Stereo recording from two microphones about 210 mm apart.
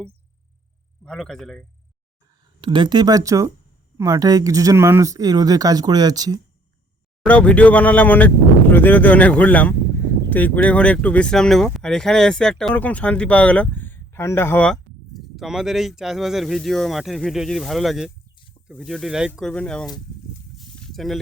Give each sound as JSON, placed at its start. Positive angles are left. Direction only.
{"t": 1.0, "sound": "speech", "side_deg": 0}
{"t": 2.4, "sound": "speech", "side_deg": -20}
{"t": 7.3, "sound": "speech", "side_deg": 5}
{"t": 20.8, "sound": "a sound", "side_deg": 0}